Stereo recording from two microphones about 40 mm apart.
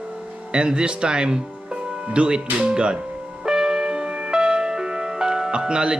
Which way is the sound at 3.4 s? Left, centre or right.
Centre.